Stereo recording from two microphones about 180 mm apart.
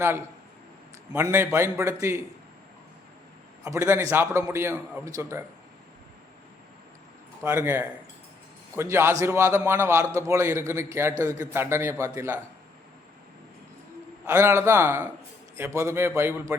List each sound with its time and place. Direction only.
0.0 s a man's voice: 15° right (ahead or behind)
3.6 s a man's voice: 15° right (ahead or behind)
7.4 s a man's voice: 15° right (ahead or behind)
14.3 s a man's voice: 15° right (ahead or behind)